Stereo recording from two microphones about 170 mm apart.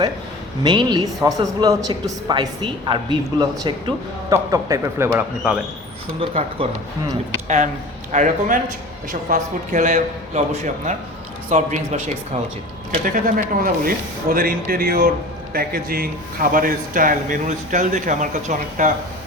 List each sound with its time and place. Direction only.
0.6 s speech: 25° right (ahead or behind)
6.1 s speech: 35° right (ahead or behind)
7.4 s speech: 45° right (ahead or behind)
11.4 s speech: 45° right (ahead or behind)